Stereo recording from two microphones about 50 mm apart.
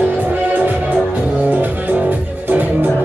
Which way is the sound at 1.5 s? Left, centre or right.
Right.